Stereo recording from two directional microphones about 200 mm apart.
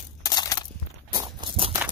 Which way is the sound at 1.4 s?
25° right (ahead or behind).